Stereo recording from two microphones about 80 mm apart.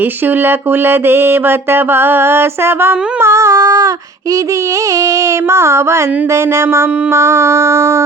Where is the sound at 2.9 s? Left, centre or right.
Centre.